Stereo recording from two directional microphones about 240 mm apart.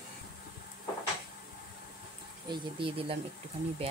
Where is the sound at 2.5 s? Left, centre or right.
Right.